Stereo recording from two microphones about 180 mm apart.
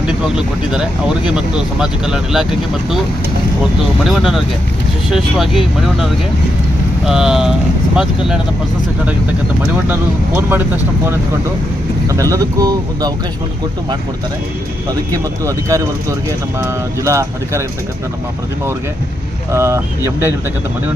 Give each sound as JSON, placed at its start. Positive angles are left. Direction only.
{"t": 1.8, "sound": "speech", "side_deg": -5}
{"t": 4.1, "sound": "speech", "side_deg": 0}
{"t": 9.7, "sound": "speech", "side_deg": -10}
{"t": 12.0, "sound": "speech", "side_deg": -15}
{"t": 15.4, "sound": "speech", "side_deg": -15}
{"t": 19.5, "sound": "speech", "side_deg": -15}